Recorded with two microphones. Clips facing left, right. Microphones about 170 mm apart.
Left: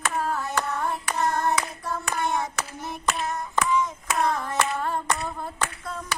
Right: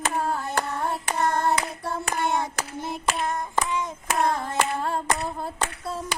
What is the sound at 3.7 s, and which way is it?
Hands, 30° right (ahead or behind).